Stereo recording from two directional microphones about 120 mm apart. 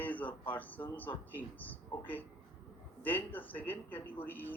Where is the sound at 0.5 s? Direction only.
15° left (ahead or behind).